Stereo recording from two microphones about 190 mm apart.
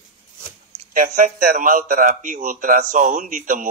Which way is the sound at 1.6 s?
45° right (ahead or behind).